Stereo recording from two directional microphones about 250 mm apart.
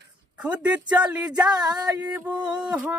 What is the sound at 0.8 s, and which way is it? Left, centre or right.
A man's voice, centre.